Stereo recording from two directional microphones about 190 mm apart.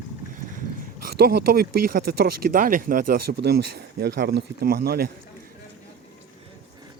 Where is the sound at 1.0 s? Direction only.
55° right (ahead or behind).